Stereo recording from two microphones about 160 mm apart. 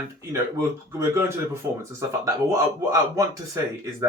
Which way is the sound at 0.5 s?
20° right (ahead or behind).